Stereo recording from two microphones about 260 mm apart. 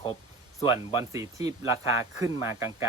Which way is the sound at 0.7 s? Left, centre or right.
Centre.